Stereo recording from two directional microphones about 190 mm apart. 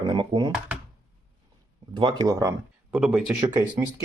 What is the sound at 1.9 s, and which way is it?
Speech, 25° right (ahead or behind).